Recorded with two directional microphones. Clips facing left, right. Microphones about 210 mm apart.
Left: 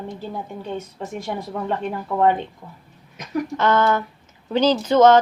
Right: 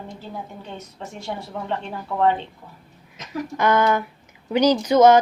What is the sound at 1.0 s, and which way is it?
Speech, 15° left (ahead or behind).